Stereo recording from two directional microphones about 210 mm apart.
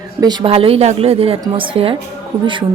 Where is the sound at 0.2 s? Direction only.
20° right (ahead or behind).